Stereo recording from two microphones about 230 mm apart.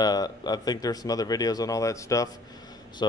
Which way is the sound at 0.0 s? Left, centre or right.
Centre.